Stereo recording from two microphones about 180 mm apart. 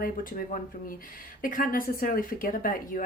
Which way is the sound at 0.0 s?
50° left (ahead or behind).